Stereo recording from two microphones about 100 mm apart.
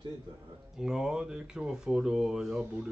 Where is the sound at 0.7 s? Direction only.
5° right (ahead or behind).